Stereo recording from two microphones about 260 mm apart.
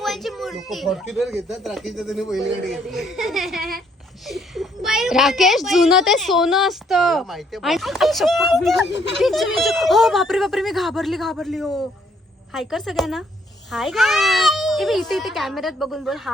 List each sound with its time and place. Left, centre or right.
0.0 s a child's voice: centre
8.9 s speech: left
9.2 s a child's voice: centre